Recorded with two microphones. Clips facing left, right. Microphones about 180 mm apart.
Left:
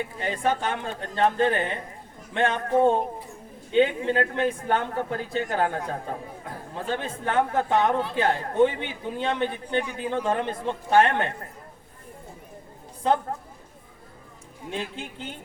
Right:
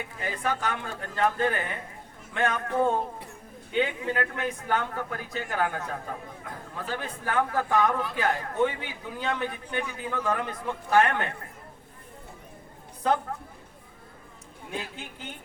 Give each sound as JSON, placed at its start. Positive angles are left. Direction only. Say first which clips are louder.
{"t": 0.2, "sound": "a man's voice", "louder": "left 4 dB", "side_deg": 25}
{"t": 13.0, "sound": "a man's voice", "louder": "left 2 dB", "side_deg": 25}
{"t": 14.7, "sound": "a man's voice", "louder": "left 4 dB", "side_deg": 30}